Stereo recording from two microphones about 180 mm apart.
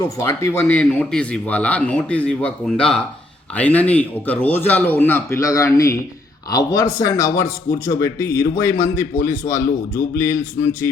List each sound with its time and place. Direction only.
0.0 s speech: 15° left (ahead or behind)